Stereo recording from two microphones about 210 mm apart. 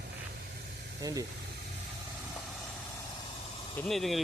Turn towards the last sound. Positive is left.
turn(degrees=0)  # may be behind; listen again after turning